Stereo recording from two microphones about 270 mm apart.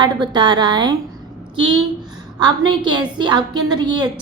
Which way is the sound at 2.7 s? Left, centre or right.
Centre.